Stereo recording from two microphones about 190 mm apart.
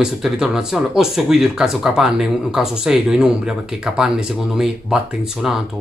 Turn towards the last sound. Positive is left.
turn(degrees=0)  # may be behind; listen again after turning